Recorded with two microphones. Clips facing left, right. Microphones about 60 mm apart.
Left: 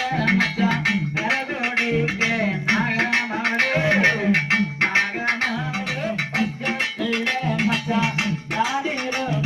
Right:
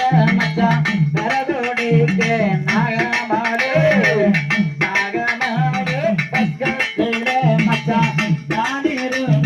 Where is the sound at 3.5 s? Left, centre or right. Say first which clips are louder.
Right 4 dB; right.